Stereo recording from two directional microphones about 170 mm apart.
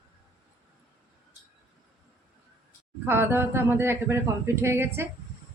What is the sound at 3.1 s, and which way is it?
A man's voice, 15° right (ahead or behind).